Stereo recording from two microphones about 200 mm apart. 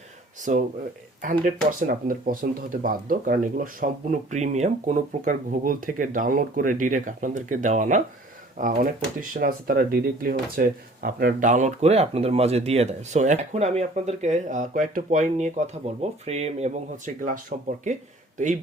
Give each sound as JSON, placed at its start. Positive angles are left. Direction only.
{"t": 0.5, "sound": "speech", "side_deg": -35}
{"t": 17.5, "sound": "speech", "side_deg": -50}
{"t": 18.3, "sound": "speech", "side_deg": -40}